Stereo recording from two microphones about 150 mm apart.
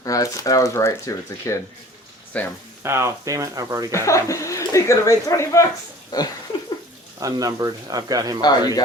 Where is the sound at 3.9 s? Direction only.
20° left (ahead or behind).